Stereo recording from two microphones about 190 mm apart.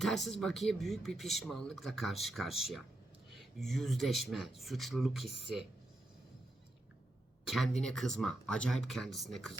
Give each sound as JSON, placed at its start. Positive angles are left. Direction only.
{"t": 0.0, "sound": "speech", "side_deg": 0}
{"t": 7.4, "sound": "speech", "side_deg": 0}